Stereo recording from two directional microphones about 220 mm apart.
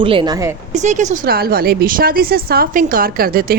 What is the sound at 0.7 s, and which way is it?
A woman's voice, 35° right (ahead or behind).